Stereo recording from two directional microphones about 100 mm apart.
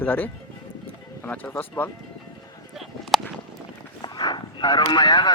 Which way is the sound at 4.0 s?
45° left (ahead or behind).